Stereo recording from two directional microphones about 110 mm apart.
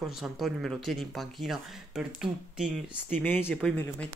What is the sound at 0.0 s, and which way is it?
Speech, centre (ahead or behind).